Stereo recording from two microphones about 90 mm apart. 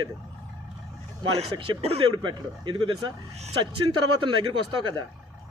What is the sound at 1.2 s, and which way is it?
Speech, 60° right (ahead or behind).